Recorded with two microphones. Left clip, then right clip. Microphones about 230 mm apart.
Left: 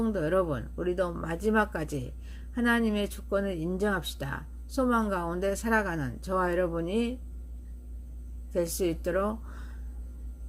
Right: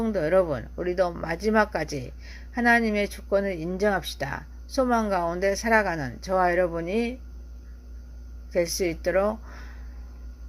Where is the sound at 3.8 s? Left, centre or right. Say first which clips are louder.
Right 7 dB; centre.